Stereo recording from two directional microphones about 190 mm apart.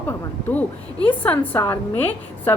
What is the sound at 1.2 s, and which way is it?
Speech, 10° left (ahead or behind).